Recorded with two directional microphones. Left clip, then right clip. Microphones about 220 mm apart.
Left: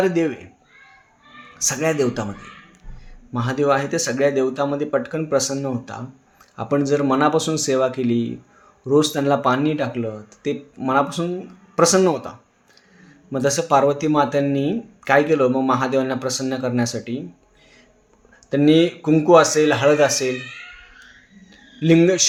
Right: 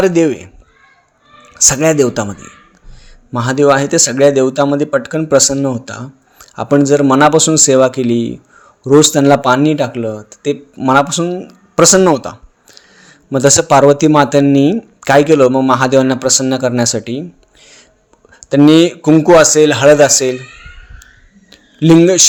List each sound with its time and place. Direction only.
0.0 s speech: 45° right (ahead or behind)
1.5 s speech: 45° right (ahead or behind)
3.3 s speech: 45° right (ahead or behind)
18.3 s speech: 45° right (ahead or behind)
21.5 s a sound: 40° right (ahead or behind)